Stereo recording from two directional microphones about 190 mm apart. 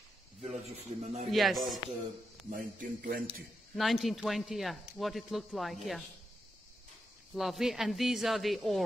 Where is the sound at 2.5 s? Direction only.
45° right (ahead or behind).